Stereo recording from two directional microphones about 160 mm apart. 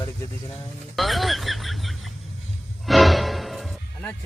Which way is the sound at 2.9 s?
Centre (ahead or behind).